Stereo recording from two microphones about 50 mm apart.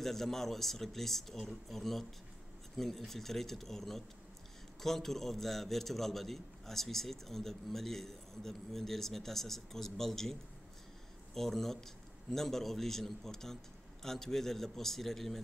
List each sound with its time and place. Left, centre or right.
0.0 s a man's voice: centre
11.3 s a man's voice: centre